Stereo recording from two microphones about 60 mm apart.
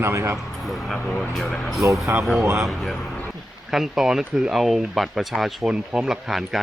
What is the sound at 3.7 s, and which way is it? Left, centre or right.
Speech, centre.